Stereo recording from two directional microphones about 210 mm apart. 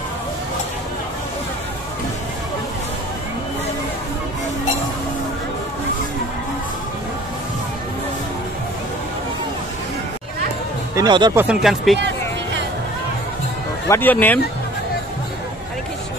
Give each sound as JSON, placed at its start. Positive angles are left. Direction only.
{"t": 11.0, "sound": "speech", "side_deg": -20}
{"t": 11.4, "sound": "speech", "side_deg": 0}
{"t": 13.8, "sound": "speech", "side_deg": 10}